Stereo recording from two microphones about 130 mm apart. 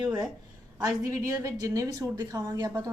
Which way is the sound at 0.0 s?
35° right (ahead or behind).